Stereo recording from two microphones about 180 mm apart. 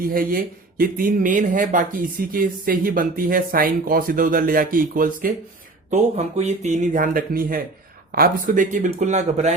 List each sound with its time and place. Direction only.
0.0 s speech: 50° right (ahead or behind)
5.9 s speech: 40° right (ahead or behind)